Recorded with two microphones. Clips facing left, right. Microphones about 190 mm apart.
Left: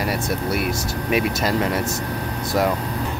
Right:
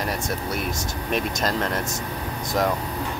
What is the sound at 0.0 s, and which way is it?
Speech, 10° left (ahead or behind).